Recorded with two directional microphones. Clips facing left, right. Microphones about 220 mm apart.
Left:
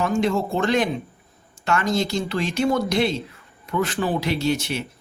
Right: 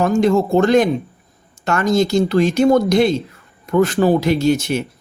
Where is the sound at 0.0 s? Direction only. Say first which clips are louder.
Right 7 dB; 45° right (ahead or behind).